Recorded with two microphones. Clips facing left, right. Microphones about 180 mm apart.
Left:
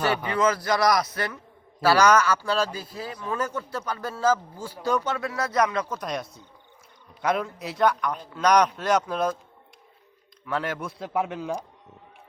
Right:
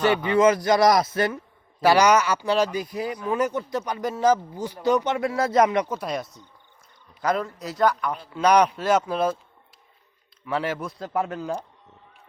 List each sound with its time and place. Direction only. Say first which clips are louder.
0.3 s a man's voice: right 8 dB; 20° right (ahead or behind)
10.4 s speech: right 2 dB; 5° right (ahead or behind)